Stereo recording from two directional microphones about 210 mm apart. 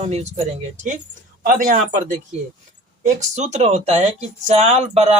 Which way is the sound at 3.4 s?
35° right (ahead or behind).